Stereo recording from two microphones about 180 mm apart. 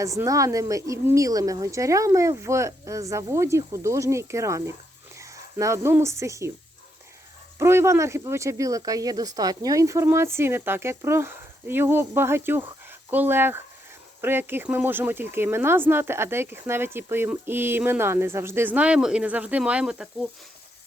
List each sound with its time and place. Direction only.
0.0 s speech: 15° right (ahead or behind)
7.6 s speech: 15° right (ahead or behind)